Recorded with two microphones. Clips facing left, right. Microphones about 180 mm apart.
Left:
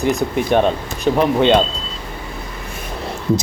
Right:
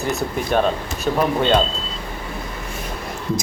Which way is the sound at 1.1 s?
15° left (ahead or behind).